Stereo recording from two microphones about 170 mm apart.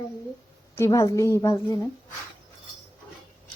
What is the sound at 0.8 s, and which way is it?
A woman's voice, 20° left (ahead or behind).